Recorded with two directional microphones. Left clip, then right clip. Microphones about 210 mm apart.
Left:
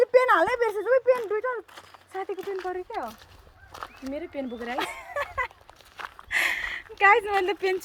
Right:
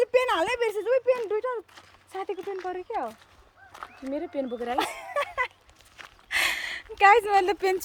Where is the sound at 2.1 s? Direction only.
20° right (ahead or behind).